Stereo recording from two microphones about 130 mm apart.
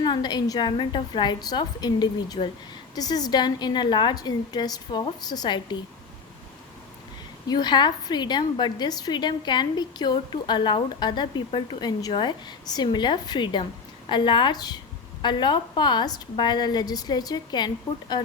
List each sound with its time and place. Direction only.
0.0 s a woman's voice: 35° left (ahead or behind)
7.4 s a woman's voice: 35° left (ahead or behind)